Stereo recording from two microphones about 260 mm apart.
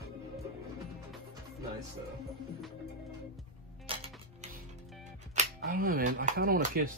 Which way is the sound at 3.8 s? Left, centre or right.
Right.